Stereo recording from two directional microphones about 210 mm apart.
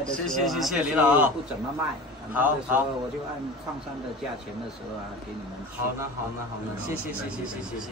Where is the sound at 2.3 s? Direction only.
5° right (ahead or behind).